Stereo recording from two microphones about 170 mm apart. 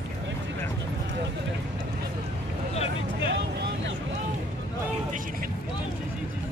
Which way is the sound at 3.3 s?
80° right.